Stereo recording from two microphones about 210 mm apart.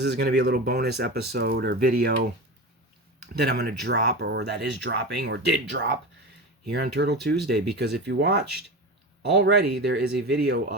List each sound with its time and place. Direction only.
0.0 s speech: 50° right (ahead or behind)
3.3 s speech: 50° right (ahead or behind)